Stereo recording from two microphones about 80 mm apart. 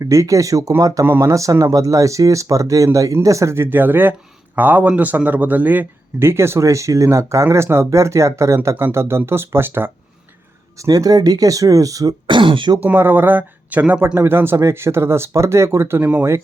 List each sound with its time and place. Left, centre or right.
0.0 s speech: right
10.8 s speech: right
12.3 s speech: right
12.8 s speech: right
14.2 s speech: right